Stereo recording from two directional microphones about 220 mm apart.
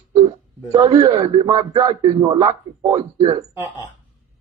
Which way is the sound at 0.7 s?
15° right (ahead or behind).